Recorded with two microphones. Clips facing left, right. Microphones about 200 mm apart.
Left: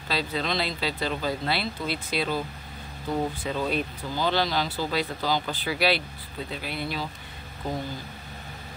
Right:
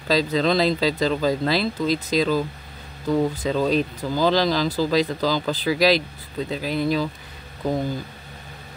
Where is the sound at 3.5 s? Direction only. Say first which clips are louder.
Right 7 dB; 90° right.